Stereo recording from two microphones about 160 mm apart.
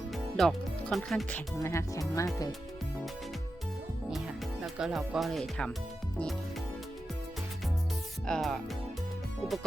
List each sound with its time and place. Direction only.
0.1 s speech: centre (ahead or behind)
1.6 s speech: 20° left (ahead or behind)
4.6 s speech: centre (ahead or behind)
8.3 s speech: centre (ahead or behind)